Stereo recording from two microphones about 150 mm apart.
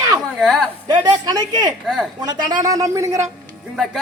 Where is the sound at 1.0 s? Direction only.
25° right (ahead or behind).